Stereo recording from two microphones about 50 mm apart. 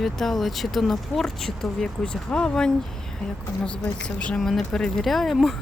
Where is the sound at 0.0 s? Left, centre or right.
Centre.